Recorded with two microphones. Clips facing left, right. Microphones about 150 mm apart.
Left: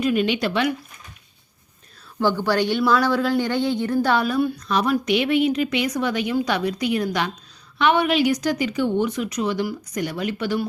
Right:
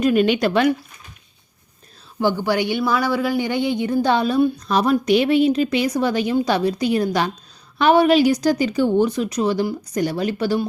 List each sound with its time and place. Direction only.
0.0 s speech: 45° right (ahead or behind)
2.1 s speech: 15° right (ahead or behind)
4.7 s speech: 35° right (ahead or behind)